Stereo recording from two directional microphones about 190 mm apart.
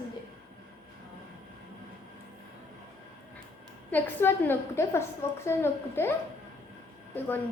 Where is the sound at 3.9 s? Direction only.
10° left (ahead or behind).